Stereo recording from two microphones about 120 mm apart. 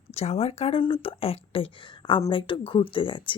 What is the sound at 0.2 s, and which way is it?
A woman's voice, 60° left (ahead or behind).